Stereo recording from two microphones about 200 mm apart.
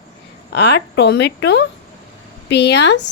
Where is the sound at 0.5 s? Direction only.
55° left (ahead or behind).